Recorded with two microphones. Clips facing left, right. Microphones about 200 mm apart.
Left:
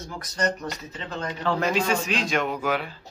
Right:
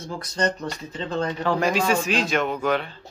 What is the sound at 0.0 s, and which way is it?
Speech, 30° right (ahead or behind).